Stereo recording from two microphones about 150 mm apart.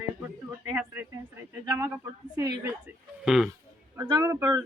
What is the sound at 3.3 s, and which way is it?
Speech, 5° right (ahead or behind).